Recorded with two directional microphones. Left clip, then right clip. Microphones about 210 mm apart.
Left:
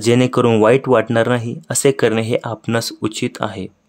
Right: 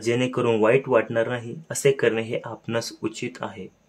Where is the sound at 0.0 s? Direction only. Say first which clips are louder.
Left 9 dB; 45° left (ahead or behind).